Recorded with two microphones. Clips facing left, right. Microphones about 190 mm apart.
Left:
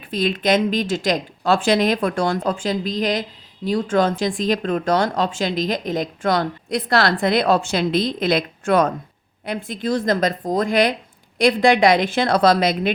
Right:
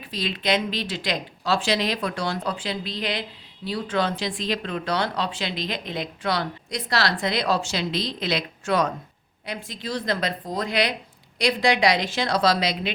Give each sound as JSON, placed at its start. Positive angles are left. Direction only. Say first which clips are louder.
{"t": 0.0, "sound": "speech", "louder": "left 7 dB", "side_deg": 50}